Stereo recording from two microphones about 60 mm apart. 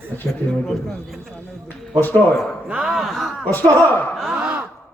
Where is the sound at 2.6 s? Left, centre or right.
Centre.